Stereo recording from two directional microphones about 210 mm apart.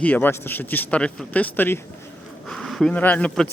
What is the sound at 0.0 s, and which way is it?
A man's voice, 10° left (ahead or behind).